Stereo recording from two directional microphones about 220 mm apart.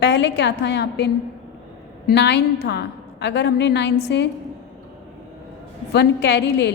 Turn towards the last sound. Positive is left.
turn(degrees=50)  # may be behind; listen again after turning